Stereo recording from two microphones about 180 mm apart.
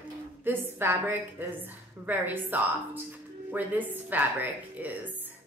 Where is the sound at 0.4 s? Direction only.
10° right (ahead or behind).